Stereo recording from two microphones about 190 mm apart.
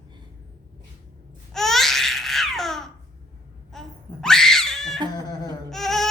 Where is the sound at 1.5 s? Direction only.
Centre (ahead or behind).